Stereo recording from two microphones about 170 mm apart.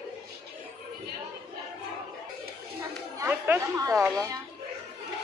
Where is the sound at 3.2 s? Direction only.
15° right (ahead or behind).